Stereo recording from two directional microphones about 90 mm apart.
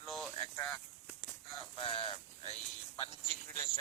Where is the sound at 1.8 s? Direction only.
80° left.